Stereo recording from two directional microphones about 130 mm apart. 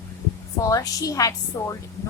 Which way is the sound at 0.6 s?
25° left (ahead or behind).